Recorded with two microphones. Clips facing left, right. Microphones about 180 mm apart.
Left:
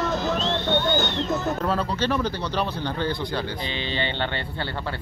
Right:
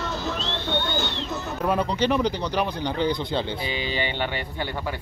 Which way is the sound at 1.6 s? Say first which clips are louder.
Right 7 dB; 15° right (ahead or behind).